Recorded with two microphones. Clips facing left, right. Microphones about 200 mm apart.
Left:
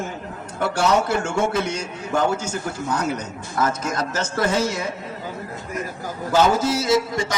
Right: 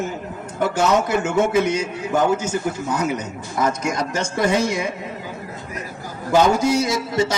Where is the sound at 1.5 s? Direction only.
10° right (ahead or behind).